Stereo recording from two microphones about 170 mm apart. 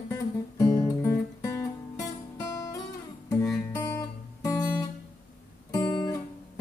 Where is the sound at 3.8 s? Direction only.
20° left (ahead or behind).